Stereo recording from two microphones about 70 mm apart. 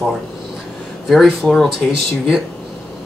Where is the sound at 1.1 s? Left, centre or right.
Centre.